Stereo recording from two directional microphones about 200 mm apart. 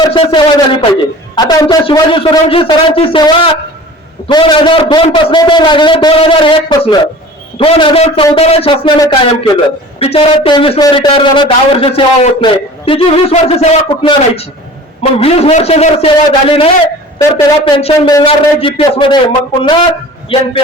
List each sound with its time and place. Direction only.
0.1 s a man's voice: 25° left (ahead or behind)